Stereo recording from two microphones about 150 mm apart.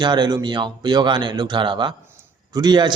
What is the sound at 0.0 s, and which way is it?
A man's voice, 30° right (ahead or behind).